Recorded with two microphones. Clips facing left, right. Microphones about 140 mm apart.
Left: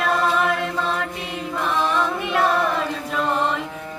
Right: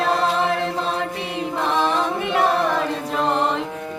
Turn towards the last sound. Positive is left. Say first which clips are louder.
# right 2 dB
turn(degrees=-30)  # may be behind; listen again after turning